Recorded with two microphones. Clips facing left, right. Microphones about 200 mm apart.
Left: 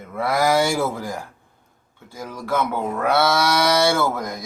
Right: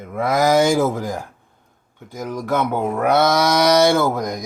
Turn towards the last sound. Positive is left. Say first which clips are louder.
# right 4 dB
turn(degrees=-15)  # may be behind; listen again after turning